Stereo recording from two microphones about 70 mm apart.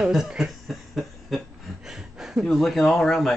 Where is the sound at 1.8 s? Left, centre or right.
Centre.